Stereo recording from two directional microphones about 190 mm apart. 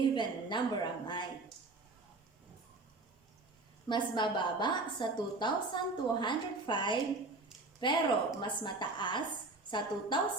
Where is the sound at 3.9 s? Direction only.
25° left (ahead or behind).